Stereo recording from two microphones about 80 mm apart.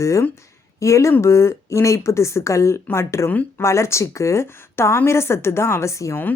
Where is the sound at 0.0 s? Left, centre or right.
Left.